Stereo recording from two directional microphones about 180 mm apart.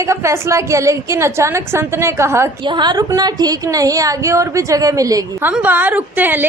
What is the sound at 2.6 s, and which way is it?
A woman's voice, 25° right (ahead or behind).